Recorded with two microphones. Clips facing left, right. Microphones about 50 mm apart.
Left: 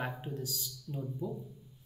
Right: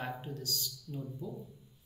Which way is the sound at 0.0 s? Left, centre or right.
Centre.